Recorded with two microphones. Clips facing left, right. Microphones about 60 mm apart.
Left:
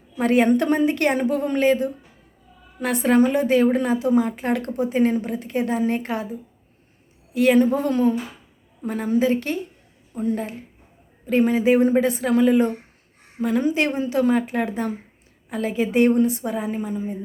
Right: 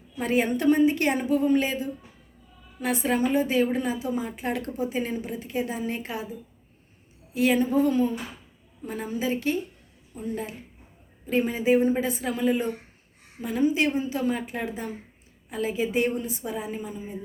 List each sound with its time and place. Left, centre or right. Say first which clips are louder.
0.2 s a woman's voice: left 7 dB; left
7.3 s a woman's voice: left 5 dB; left